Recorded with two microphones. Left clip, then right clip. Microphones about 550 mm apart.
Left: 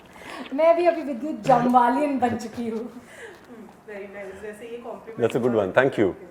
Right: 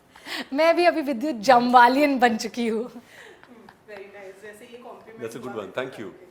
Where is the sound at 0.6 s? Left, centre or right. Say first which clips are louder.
Even; right.